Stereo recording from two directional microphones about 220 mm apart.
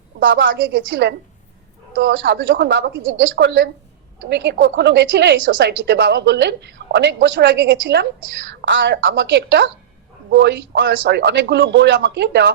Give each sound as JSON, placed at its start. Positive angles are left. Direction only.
{"t": 0.2, "sound": "a woman's voice", "side_deg": -55}